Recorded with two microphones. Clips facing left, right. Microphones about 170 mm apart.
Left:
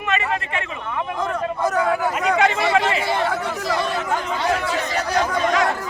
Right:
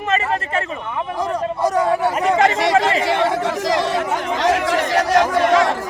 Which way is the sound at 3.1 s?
90° right.